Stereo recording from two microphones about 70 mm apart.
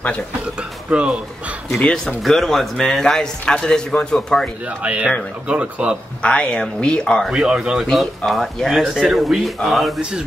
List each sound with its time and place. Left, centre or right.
0.6 s speech: centre
1.8 s speech: centre
4.6 s speech: centre
6.2 s speech: centre
7.2 s speech: centre
7.8 s speech: centre